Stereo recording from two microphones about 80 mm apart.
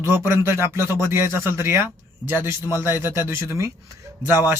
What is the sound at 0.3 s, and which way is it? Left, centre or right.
Speech, right.